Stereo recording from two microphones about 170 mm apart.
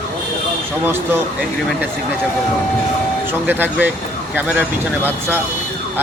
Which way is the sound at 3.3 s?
10° right (ahead or behind).